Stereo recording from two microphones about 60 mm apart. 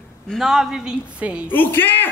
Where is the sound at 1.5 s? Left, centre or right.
Left.